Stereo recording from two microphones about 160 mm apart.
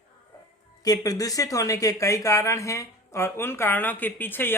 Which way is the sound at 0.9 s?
20° left (ahead or behind).